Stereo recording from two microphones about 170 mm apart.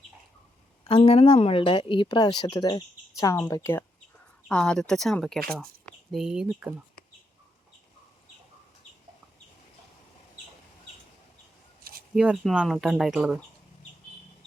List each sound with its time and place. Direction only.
0.9 s a woman's voice: 35° left (ahead or behind); by 6.7 s 5° right (ahead or behind)
11.8 s a sound: 60° right (ahead or behind)
12.1 s a woman's voice: centre (ahead or behind)